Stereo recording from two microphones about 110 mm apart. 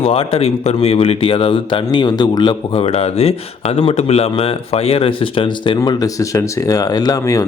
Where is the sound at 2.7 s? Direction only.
60° left (ahead or behind).